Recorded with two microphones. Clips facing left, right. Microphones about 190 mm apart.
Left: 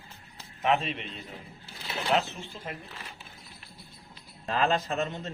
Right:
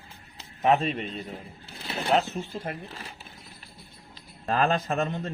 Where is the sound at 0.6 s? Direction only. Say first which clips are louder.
Right 4 dB; 40° right (ahead or behind).